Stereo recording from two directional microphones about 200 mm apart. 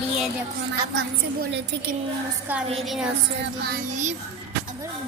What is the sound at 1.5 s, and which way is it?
Speech, 60° right (ahead or behind).